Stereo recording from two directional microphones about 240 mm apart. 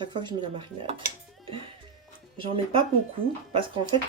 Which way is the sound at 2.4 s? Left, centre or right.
Right.